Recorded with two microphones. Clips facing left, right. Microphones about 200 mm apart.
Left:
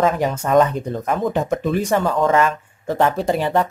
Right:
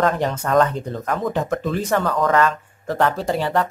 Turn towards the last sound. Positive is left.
turn(degrees=15)  # may be behind; listen again after turning